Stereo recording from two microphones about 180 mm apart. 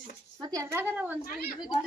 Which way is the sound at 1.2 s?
55° left (ahead or behind).